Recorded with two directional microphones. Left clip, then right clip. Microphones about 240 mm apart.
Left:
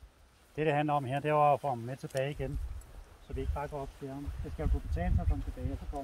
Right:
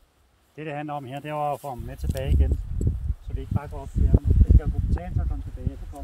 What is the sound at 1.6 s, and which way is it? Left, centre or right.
Speech, centre.